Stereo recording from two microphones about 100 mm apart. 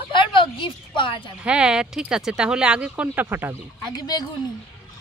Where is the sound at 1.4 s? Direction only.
10° right (ahead or behind).